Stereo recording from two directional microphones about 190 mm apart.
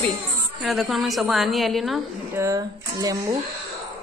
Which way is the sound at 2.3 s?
15° right (ahead or behind).